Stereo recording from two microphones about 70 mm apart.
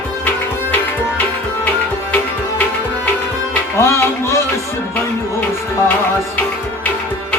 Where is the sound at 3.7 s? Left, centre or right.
Left.